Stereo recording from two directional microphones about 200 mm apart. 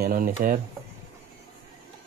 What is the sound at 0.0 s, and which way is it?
Speech, 50° right (ahead or behind).